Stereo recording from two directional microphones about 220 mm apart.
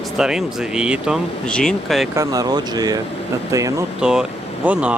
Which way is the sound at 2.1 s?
15° right (ahead or behind).